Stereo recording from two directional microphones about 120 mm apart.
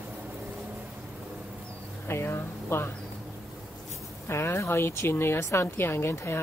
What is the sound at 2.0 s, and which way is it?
Speech, 20° left (ahead or behind).